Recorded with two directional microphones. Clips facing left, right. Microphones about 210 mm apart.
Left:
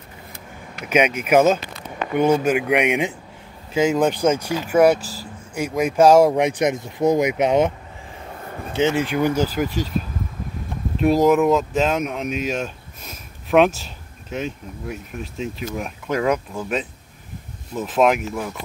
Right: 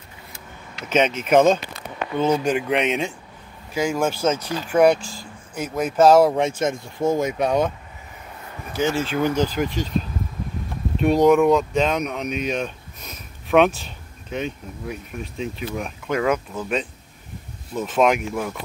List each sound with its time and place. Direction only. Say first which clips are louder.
0.8 s speech: left 1 dB; 10° left (ahead or behind)
8.7 s speech: left 2 dB; 20° left (ahead or behind)
11.0 s speech: even; centre (ahead or behind)
12.6 s a sound: even; centre (ahead or behind)
13.7 s speech: even; centre (ahead or behind)